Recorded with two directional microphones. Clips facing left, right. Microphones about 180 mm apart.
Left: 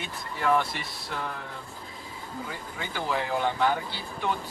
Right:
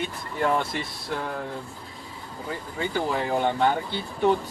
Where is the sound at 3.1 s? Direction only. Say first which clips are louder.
Even; 50° right (ahead or behind).